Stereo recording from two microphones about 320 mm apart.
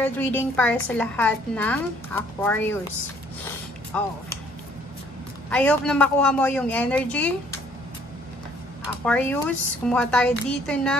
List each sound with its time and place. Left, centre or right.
0.0 s a woman's voice: centre
3.9 s a woman's voice: centre
5.5 s a woman's voice: centre
9.0 s a woman's voice: centre